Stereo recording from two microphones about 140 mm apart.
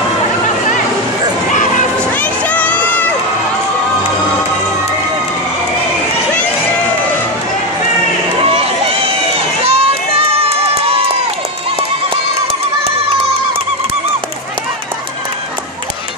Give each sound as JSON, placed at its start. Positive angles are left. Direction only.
{"t": 2.1, "sound": "crowd", "side_deg": 10}
{"t": 8.5, "sound": "run", "side_deg": -45}
{"t": 9.6, "sound": "crowd", "side_deg": -45}